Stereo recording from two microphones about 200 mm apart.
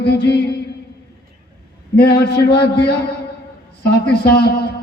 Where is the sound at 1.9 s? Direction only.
55° left (ahead or behind).